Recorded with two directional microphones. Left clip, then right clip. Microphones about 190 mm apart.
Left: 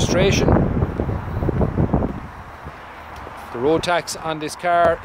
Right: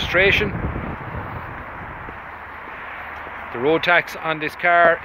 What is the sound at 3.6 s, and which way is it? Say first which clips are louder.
Speech: right 2 dB; 15° left (ahead or behind).